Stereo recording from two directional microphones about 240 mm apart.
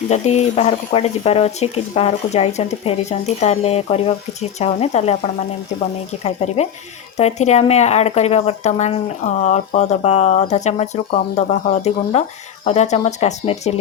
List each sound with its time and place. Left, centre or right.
0.1 s speech: left
6.2 s speech: left